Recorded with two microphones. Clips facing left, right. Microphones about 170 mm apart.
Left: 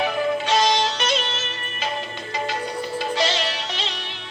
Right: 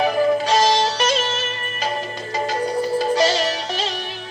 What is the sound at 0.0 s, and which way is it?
Music, 40° right (ahead or behind).